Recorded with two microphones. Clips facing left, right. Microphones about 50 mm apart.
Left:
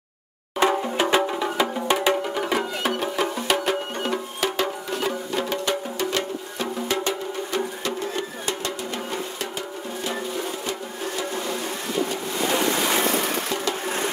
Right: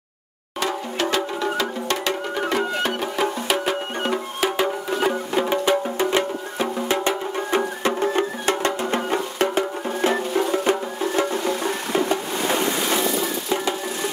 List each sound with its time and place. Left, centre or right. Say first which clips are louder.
0.6 s music: left 3 dB; left
3.0 s music: right 1 dB; centre
4.0 s music: right 3 dB; centre; by 12.0 s right